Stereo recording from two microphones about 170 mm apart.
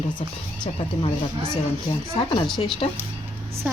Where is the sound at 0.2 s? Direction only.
35° left (ahead or behind).